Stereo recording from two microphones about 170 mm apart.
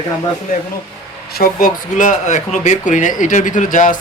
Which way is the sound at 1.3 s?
55° left (ahead or behind).